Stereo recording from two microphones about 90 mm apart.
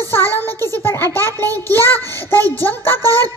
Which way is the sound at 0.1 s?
25° left (ahead or behind).